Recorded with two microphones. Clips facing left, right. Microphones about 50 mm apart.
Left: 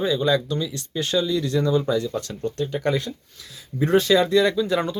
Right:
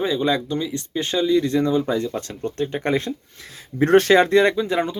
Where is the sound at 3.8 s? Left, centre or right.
Right.